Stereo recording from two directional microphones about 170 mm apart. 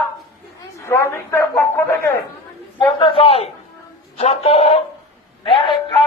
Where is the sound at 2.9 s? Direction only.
30° left (ahead or behind).